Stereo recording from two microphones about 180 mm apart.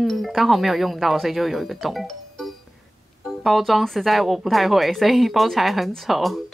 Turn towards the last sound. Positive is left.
turn(degrees=0)  # may be behind; listen again after turning